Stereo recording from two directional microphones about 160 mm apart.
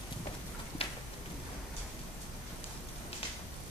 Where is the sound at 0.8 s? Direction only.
35° left (ahead or behind).